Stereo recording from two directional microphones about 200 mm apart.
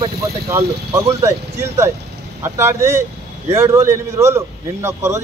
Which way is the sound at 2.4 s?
10° right (ahead or behind).